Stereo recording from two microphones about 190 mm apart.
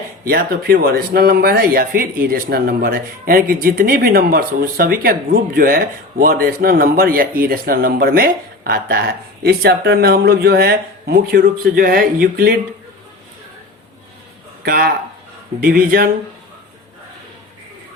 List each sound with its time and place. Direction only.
0.3 s speech: 50° right (ahead or behind)
14.6 s speech: 50° right (ahead or behind)